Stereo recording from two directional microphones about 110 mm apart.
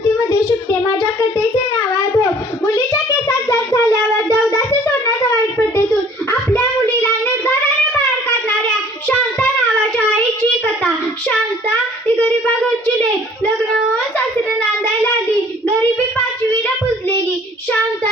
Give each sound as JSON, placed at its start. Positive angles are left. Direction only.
{"t": 0.7, "sound": "child singing", "side_deg": 25}